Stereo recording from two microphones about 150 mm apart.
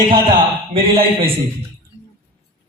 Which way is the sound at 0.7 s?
40° right (ahead or behind).